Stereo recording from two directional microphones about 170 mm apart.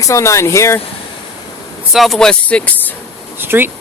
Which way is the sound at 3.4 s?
10° right (ahead or behind).